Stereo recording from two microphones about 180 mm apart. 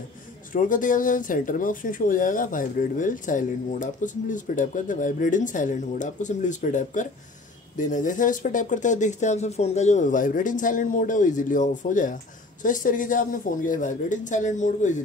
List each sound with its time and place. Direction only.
0.5 s speech: 45° left (ahead or behind)